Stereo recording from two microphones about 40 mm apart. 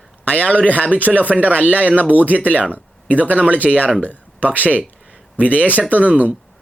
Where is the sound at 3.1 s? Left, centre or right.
Right.